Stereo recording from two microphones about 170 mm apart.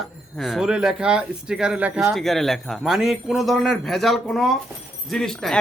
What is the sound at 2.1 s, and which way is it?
Speech, centre (ahead or behind).